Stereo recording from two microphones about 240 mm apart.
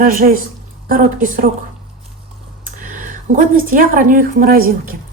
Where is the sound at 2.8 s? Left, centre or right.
Right.